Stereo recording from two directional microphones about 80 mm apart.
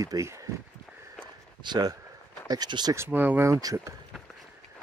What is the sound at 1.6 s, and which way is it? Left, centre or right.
Speech, right.